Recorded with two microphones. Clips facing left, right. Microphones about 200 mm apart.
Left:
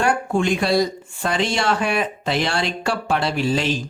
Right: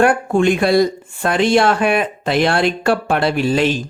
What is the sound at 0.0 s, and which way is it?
Speech, 55° right (ahead or behind).